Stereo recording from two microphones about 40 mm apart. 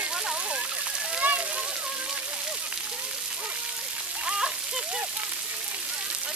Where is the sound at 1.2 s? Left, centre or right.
Right.